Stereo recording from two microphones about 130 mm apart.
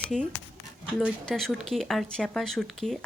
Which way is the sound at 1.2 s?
5° left (ahead or behind).